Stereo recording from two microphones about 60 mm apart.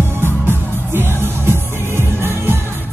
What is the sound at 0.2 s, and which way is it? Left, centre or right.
Music, right.